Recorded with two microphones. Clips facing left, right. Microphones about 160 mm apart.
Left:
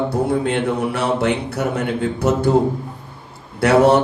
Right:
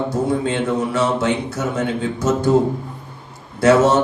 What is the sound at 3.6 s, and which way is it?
Speech, 65° left (ahead or behind).